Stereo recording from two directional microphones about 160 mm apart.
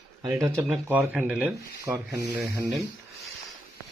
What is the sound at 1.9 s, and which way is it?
Speech, 20° right (ahead or behind).